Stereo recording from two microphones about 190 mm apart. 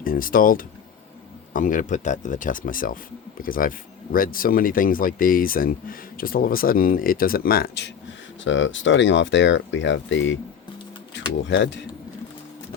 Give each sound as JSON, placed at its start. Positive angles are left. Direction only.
{"t": 0.0, "sound": "speech", "side_deg": 45}
{"t": 8.4, "sound": "speech", "side_deg": 75}